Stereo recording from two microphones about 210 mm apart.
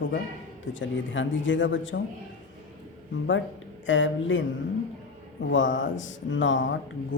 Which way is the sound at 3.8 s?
65° left (ahead or behind).